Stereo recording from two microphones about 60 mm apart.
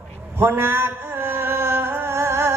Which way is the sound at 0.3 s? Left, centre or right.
Right.